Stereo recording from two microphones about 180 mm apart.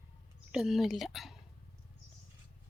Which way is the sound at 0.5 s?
Centre (ahead or behind).